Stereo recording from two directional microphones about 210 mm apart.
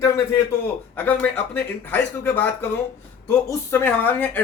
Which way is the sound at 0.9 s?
10° left (ahead or behind).